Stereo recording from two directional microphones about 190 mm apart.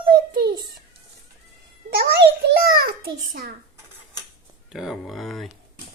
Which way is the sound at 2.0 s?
55° right (ahead or behind).